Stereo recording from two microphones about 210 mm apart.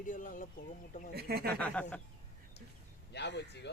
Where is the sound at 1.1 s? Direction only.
50° right (ahead or behind).